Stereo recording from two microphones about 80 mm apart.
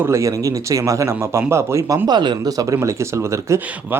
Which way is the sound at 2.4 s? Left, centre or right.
Right.